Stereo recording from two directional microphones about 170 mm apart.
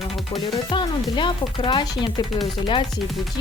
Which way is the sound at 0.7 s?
30° left (ahead or behind).